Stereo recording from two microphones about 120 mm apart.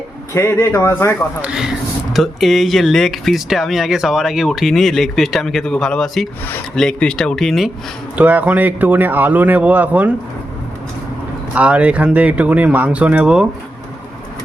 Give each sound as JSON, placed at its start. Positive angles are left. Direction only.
{"t": 0.3, "sound": "speech", "side_deg": 20}
{"t": 1.4, "sound": "speech", "side_deg": -10}
{"t": 8.1, "sound": "speech", "side_deg": -15}
{"t": 11.5, "sound": "speech", "side_deg": -10}